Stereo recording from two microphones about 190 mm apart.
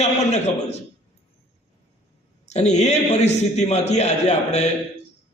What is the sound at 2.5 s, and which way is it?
A man's voice, 35° left (ahead or behind).